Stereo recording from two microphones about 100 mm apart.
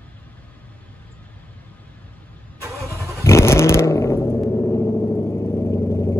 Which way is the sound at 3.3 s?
25° left (ahead or behind).